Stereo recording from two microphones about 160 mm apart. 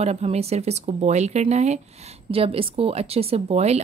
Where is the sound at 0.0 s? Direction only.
40° right (ahead or behind).